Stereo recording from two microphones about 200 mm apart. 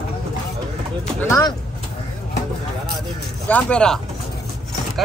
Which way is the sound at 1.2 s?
15° left (ahead or behind).